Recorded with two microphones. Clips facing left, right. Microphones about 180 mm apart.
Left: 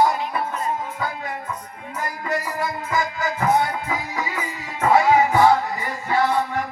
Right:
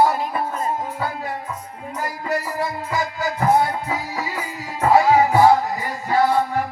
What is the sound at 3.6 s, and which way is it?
Music, 30° right (ahead or behind).